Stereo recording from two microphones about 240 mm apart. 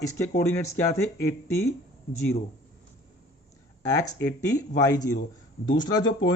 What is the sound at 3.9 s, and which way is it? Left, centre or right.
Speech, centre.